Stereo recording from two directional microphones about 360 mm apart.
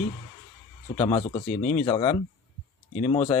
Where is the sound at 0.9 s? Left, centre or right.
Centre.